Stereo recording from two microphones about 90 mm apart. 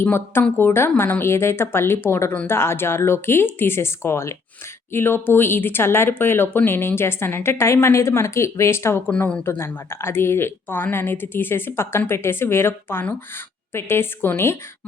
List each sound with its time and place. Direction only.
0.0 s speech: 25° left (ahead or behind)
9.0 s speech: 15° left (ahead or behind)